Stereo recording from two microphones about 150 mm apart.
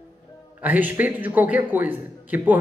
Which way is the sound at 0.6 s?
10° right (ahead or behind).